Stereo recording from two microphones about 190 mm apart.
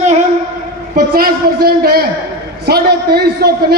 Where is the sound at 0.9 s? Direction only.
50° right (ahead or behind).